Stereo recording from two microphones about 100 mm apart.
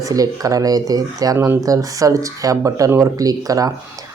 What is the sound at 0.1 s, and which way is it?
Speech, 35° right (ahead or behind).